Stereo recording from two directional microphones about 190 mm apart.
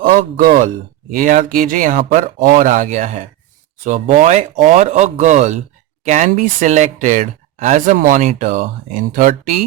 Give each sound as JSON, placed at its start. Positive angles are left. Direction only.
{"t": 0.0, "sound": "speech", "side_deg": -45}